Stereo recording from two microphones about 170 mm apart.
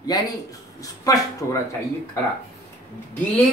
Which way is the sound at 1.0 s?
20° left (ahead or behind).